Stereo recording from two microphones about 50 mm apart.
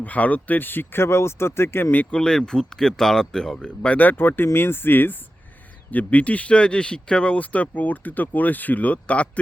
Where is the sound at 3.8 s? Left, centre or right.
Left.